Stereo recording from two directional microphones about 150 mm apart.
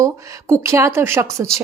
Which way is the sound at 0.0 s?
20° right (ahead or behind).